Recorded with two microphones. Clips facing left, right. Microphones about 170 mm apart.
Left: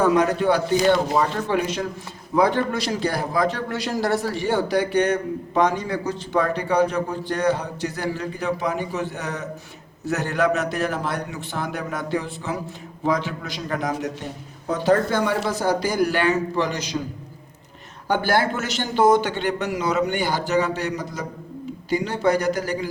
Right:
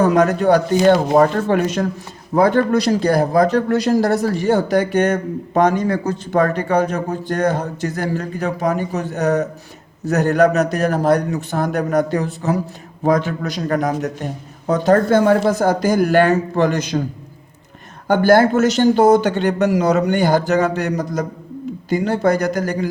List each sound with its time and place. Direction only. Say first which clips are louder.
0.0 s speech: right 4 dB; 45° right (ahead or behind)
18.1 s speech: right 9 dB; 50° right (ahead or behind)